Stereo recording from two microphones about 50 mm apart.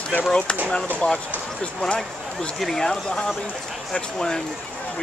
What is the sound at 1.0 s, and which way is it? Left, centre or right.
Speech, left.